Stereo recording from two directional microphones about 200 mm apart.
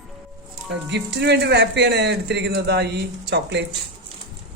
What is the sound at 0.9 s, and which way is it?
Speech, 60° right (ahead or behind).